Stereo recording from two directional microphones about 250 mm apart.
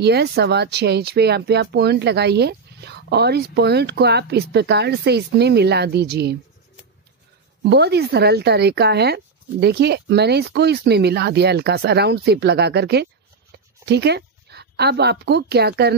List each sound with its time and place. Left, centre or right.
0.0 s speech: right
7.6 s a woman's voice: right